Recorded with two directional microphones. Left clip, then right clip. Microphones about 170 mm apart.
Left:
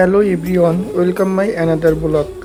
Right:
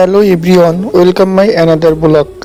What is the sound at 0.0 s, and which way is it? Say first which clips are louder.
Speech: right 6 dB; 35° right (ahead or behind).